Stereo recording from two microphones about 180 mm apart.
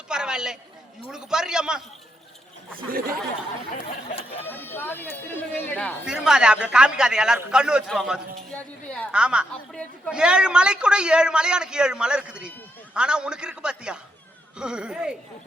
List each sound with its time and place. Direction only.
0.1 s a sound: 5° right (ahead or behind)
1.1 s a man's voice: 5° right (ahead or behind)
2.7 s speech: 55° right (ahead or behind)
3.7 s a sound: 35° left (ahead or behind)
4.4 s a man's voice: 10° left (ahead or behind)
8.5 s speech: 10° left (ahead or behind)
9.1 s a man's voice: 5° right (ahead or behind)